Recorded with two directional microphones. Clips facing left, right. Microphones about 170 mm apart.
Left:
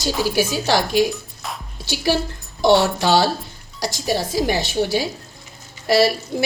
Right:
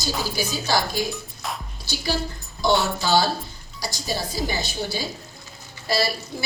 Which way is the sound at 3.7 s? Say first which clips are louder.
Left 7 dB; 90° left.